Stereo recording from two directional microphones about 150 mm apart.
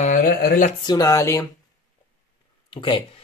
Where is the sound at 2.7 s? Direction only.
35° left (ahead or behind).